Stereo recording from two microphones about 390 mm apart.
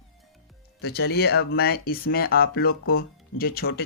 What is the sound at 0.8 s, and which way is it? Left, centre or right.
Speech, left.